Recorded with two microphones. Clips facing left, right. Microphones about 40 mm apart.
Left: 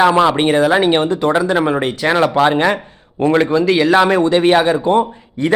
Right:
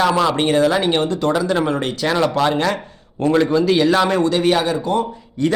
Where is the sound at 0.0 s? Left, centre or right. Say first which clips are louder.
Left 4 dB; left.